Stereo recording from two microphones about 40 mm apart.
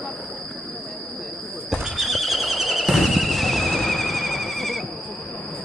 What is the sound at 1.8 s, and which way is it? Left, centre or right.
Horse, centre.